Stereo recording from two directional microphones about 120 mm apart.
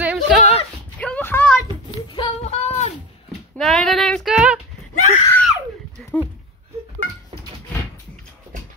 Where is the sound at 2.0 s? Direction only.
50° left (ahead or behind).